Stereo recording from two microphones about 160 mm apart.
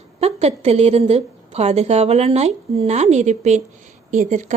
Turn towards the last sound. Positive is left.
turn(degrees=-50)  # may be behind; listen again after turning